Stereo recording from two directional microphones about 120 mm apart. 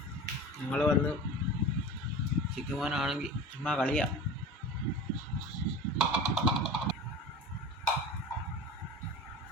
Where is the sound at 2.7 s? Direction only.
5° right (ahead or behind).